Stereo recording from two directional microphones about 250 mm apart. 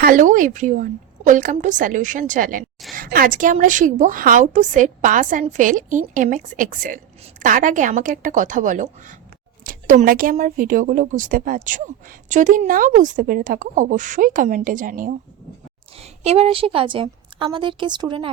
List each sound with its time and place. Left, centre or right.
0.0 s a woman's voice: right